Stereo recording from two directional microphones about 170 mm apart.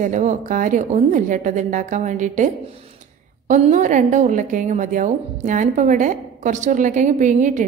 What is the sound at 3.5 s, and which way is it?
A woman's voice, 45° right (ahead or behind).